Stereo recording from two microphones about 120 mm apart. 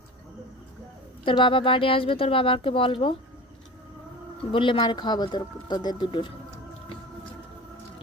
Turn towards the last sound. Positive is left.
turn(degrees=45)  # may be behind; listen again after turning